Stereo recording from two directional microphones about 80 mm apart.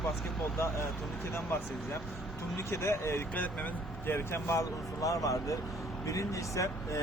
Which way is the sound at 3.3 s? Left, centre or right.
Centre.